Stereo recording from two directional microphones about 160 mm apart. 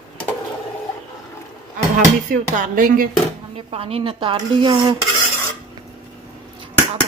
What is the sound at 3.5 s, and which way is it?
Dishes, 35° right (ahead or behind).